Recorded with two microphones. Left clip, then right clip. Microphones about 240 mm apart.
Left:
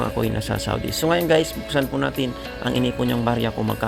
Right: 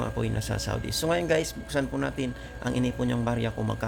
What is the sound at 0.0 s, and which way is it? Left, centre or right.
Speech, left.